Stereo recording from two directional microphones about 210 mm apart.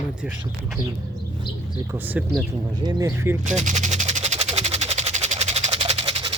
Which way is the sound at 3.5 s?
35° right (ahead or behind).